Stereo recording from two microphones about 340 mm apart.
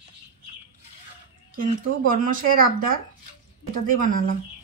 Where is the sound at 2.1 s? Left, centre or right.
Right.